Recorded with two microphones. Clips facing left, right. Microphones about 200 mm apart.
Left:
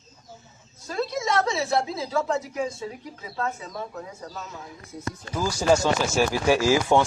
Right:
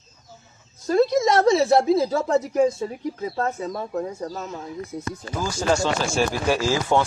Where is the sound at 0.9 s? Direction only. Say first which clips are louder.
Right 9 dB; 40° right (ahead or behind).